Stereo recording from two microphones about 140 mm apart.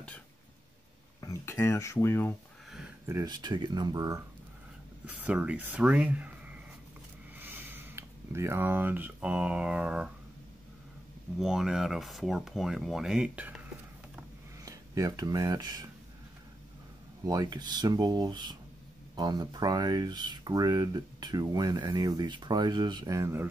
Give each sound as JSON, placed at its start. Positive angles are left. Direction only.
{"t": 1.2, "sound": "speech", "side_deg": 20}
{"t": 3.1, "sound": "speech", "side_deg": -25}
{"t": 5.0, "sound": "speech", "side_deg": -10}
{"t": 11.3, "sound": "speech", "side_deg": -5}
{"t": 14.6, "sound": "speech", "side_deg": -25}
{"t": 17.2, "sound": "speech", "side_deg": -25}